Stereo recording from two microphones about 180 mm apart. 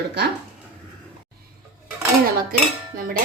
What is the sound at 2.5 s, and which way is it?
Dishes, 55° right (ahead or behind).